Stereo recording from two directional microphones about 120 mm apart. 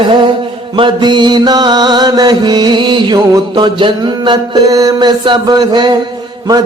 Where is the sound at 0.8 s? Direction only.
40° right (ahead or behind).